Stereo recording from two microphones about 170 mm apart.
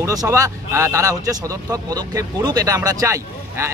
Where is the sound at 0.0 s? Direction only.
20° right (ahead or behind).